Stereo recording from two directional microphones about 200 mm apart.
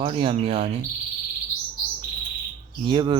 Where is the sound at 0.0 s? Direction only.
25° right (ahead or behind).